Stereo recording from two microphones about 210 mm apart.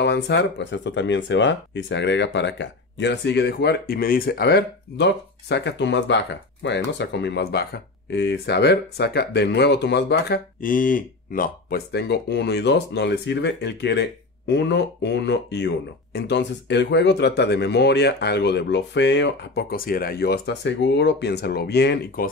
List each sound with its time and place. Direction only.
0.0 s speech: 55° left (ahead or behind)